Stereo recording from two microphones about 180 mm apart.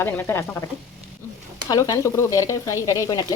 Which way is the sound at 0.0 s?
10° left (ahead or behind).